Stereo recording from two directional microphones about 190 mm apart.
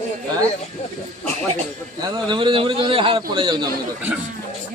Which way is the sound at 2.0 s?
25° right (ahead or behind).